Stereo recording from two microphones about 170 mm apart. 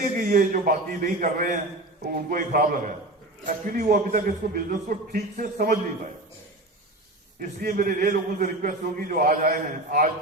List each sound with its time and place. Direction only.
0.0 s a man's voice: 55° right (ahead or behind)
7.3 s a man's voice: 55° right (ahead or behind)